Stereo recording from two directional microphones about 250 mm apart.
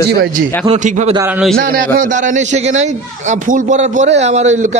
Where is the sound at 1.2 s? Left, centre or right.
Centre.